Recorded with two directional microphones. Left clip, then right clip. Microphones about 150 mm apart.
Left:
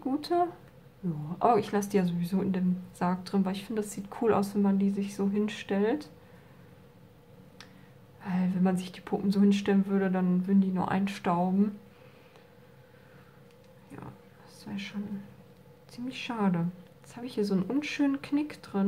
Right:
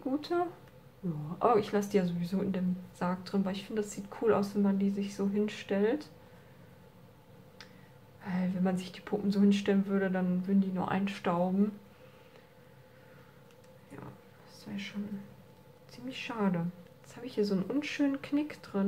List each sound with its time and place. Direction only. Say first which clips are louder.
0.2 s a woman's voice: left 5 dB; 15° left (ahead or behind)
8.2 s a woman's voice: left 3 dB; 25° left (ahead or behind)
14.6 s a woman's voice: left 2 dB; 20° left (ahead or behind)